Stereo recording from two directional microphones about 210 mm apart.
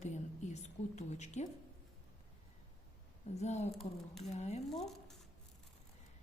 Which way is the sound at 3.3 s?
30° left (ahead or behind).